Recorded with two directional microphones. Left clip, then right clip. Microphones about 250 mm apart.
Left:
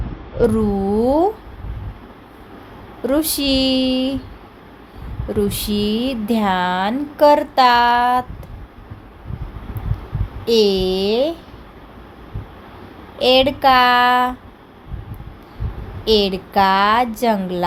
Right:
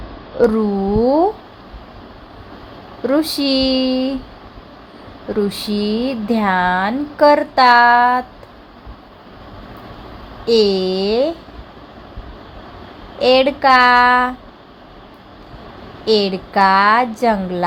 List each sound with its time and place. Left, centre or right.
0.3 s speech: centre
3.1 s speech: centre
5.3 s speech: centre
10.4 s speech: centre
13.1 s speech: centre
16.0 s speech: centre